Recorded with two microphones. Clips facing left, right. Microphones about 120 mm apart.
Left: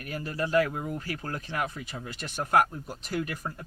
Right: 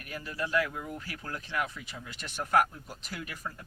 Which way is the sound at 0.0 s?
40° left (ahead or behind).